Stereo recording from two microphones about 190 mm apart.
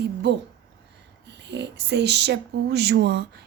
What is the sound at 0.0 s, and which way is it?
Speech, 60° right (ahead or behind).